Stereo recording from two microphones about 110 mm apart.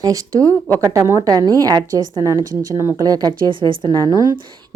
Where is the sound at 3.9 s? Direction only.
30° left (ahead or behind).